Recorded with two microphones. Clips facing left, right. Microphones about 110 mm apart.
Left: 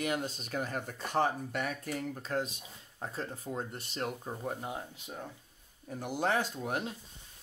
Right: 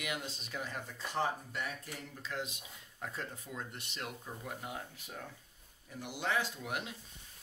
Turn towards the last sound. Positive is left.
turn(degrees=40)  # may be behind; listen again after turning